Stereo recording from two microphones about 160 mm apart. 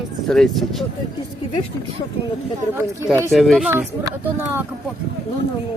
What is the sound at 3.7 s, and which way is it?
Speech, 15° right (ahead or behind).